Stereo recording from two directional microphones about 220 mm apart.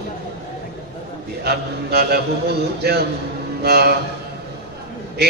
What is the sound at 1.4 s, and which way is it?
Music, 45° right (ahead or behind).